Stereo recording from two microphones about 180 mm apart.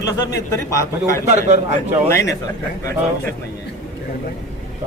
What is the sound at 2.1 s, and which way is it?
Speech, 15° left (ahead or behind).